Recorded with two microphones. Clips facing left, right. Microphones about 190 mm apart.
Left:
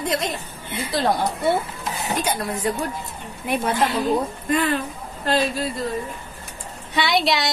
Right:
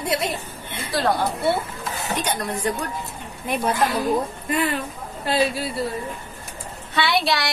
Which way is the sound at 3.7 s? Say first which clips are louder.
Even; 25° left (ahead or behind).